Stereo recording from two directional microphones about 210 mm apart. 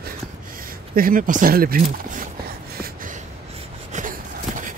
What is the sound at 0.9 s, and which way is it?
Speech, 40° right (ahead or behind).